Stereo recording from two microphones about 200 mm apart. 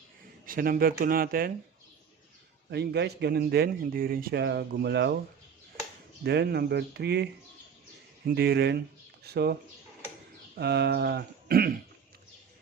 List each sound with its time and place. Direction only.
0.4 s speech: 45° right (ahead or behind)
2.6 s a man's voice: 55° right (ahead or behind)
6.2 s a man's voice: 55° right (ahead or behind)
8.3 s a man's voice: 55° right (ahead or behind)
10.6 s speech: 55° right (ahead or behind)